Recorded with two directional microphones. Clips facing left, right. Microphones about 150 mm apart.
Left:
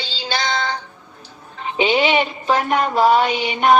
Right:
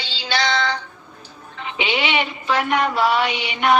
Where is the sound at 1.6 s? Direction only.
40° left (ahead or behind).